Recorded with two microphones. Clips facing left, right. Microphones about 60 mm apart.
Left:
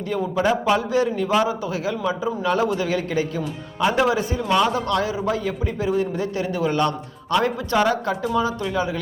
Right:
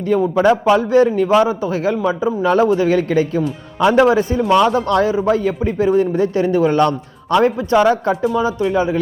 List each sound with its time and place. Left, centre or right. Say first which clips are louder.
0.1 s a man's voice: right 8 dB; right
3.8 s speech: right 7 dB; right
4.0 s a man's voice: right 7 dB; right
7.3 s speech: right 7 dB; right
8.2 s speech: right 5 dB; centre
8.7 s speech: right 7 dB; right